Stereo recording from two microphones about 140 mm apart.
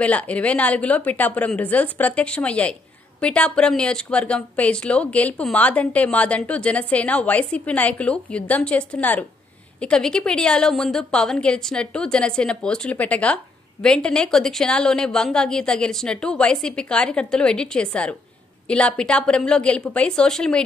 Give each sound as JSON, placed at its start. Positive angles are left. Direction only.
{"t": 0.0, "sound": "a woman's voice", "side_deg": 10}